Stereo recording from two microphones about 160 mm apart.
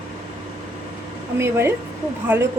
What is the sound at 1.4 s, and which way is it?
A woman's voice, 15° right (ahead or behind).